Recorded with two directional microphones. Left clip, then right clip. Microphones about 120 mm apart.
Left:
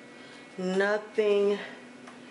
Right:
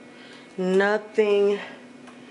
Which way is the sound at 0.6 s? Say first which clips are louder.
Right 6 dB; 25° right (ahead or behind).